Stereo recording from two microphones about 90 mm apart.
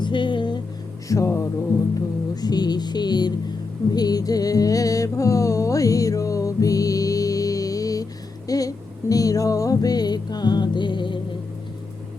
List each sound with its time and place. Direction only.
0.0 s a sound: 65° left (ahead or behind)
1.0 s music: 35° left (ahead or behind)
2.3 s speech: 50° left (ahead or behind)
3.9 s music: 45° left (ahead or behind); by 11.2 s 60° left (ahead or behind)